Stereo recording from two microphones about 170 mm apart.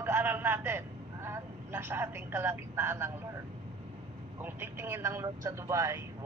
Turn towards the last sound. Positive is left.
turn(degrees=-15)  # may be behind; listen again after turning